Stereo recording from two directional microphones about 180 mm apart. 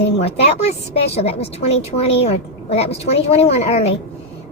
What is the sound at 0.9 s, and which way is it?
A woman's voice, 35° left (ahead or behind).